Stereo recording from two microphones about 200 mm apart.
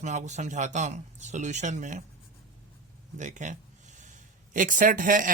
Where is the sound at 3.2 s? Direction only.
40° right (ahead or behind).